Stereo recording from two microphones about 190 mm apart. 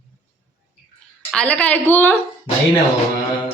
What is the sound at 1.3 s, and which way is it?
Speech, 5° left (ahead or behind).